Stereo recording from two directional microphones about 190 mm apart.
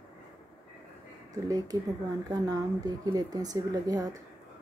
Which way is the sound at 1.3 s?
20° right (ahead or behind).